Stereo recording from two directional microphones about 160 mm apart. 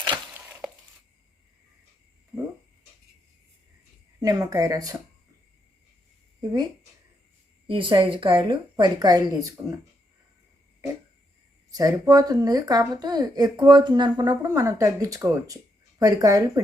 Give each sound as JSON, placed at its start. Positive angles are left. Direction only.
{"t": 0.6, "sound": "a sound", "side_deg": -5}
{"t": 4.2, "sound": "a woman's voice", "side_deg": -20}
{"t": 6.4, "sound": "speech", "side_deg": -25}
{"t": 7.7, "sound": "a woman's voice", "side_deg": -30}
{"t": 11.7, "sound": "a woman's voice", "side_deg": -25}